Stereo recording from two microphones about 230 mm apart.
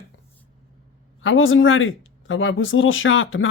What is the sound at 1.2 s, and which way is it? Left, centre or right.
Speech, left.